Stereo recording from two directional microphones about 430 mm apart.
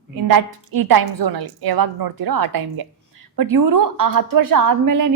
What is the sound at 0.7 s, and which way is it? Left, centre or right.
A woman's voice, right.